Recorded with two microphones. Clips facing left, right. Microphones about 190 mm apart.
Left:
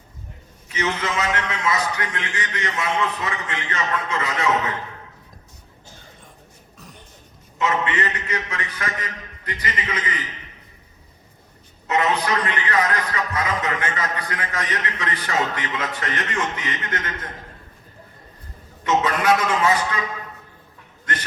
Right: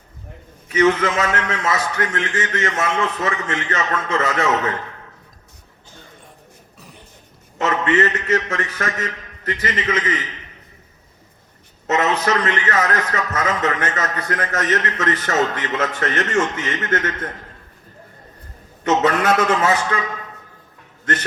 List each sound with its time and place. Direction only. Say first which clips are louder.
0.7 s a man's voice: right 9 dB; 50° right (ahead or behind)
7.6 s a man's voice: right 5 dB; 50° right (ahead or behind)
11.9 s a man's voice: right 2 dB; 45° right (ahead or behind)
18.8 s a man's voice: right 4 dB; 45° right (ahead or behind)